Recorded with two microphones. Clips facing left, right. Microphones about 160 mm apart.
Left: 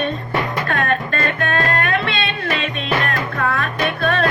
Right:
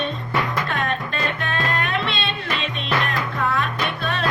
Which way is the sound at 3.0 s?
45° left (ahead or behind).